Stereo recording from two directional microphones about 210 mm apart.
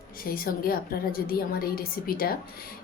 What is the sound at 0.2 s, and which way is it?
A woman's voice, 45° left (ahead or behind).